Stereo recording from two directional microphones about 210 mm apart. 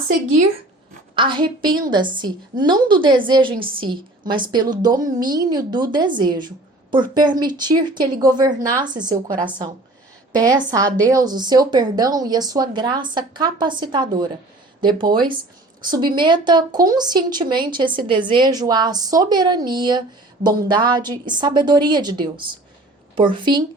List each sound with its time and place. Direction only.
1.1 s a woman's voice: 25° right (ahead or behind)